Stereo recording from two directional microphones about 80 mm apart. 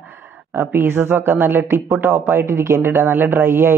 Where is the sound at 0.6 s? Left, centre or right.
Right.